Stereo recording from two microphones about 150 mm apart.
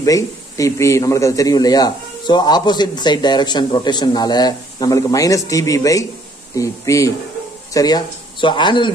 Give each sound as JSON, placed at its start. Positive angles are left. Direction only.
{"t": 0.0, "sound": "a man's voice", "side_deg": 20}